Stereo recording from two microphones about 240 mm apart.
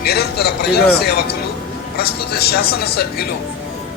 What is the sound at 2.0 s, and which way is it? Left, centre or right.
Speech, left.